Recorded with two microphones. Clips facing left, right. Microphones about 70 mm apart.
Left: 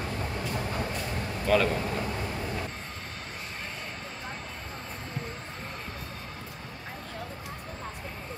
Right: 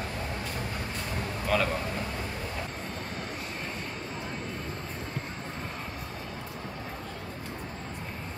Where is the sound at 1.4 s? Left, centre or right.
Centre.